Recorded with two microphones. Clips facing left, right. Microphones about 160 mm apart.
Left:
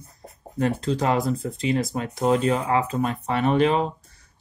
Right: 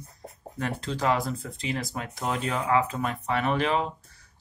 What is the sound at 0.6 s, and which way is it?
Speech, 25° left (ahead or behind).